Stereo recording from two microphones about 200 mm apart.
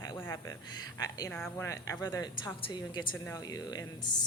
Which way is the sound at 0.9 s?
20° left (ahead or behind).